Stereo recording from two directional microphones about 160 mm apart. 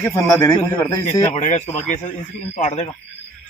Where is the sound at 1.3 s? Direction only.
45° left (ahead or behind).